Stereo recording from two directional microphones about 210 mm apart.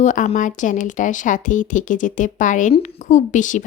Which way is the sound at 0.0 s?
35° left (ahead or behind).